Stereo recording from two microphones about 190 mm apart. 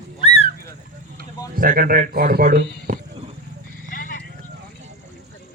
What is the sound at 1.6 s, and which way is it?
Speech, 50° right (ahead or behind).